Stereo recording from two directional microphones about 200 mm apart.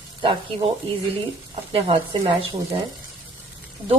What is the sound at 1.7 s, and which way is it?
A woman's voice, 30° right (ahead or behind).